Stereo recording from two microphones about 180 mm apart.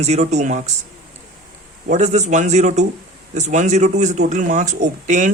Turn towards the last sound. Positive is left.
turn(degrees=-45)  # may be behind; listen again after turning